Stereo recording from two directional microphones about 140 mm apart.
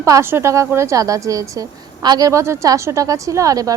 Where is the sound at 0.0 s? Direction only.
20° right (ahead or behind).